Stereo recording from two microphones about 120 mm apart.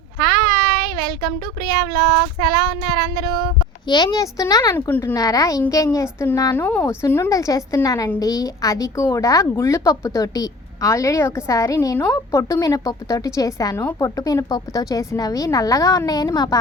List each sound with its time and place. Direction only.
0.2 s child singing: 35° left (ahead or behind)
4.7 s speech: 20° left (ahead or behind)
5.1 s speech: 30° left (ahead or behind)
6.6 s speech: 15° left (ahead or behind); by 16.6 s 35° left (ahead or behind)